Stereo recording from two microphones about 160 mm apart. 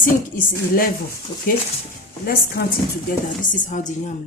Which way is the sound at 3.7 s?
50° left (ahead or behind).